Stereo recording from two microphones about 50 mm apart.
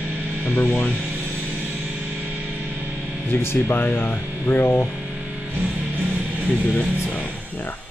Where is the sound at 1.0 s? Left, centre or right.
Right.